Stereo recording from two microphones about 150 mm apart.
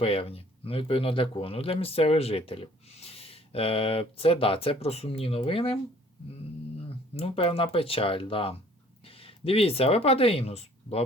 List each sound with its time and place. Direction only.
0.0 s speech: 40° left (ahead or behind)
7.1 s speech: 40° left (ahead or behind)